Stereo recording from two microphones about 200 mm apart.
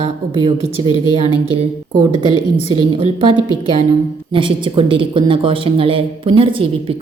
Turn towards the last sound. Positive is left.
turn(degrees=-25)  # may be behind; listen again after turning